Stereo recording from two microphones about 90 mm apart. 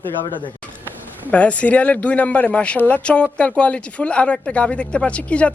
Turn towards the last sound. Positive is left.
turn(degrees=15)  # may be behind; listen again after turning